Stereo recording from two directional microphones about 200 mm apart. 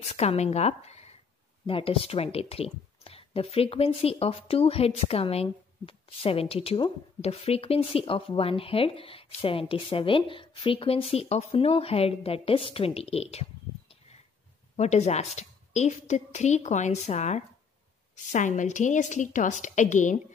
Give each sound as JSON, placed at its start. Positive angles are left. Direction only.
{"t": 0.1, "sound": "a woman's voice", "side_deg": 30}